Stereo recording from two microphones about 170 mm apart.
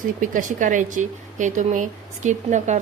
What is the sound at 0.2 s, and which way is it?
Speech, 50° right (ahead or behind).